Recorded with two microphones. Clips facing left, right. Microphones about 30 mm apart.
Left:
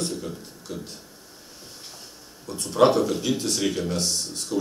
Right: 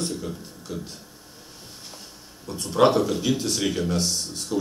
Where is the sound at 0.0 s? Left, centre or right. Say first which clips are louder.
Even; centre.